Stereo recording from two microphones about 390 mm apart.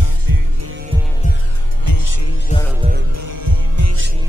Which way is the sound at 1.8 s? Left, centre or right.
Left.